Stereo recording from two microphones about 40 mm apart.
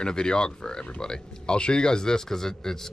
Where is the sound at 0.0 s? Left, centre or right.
Left.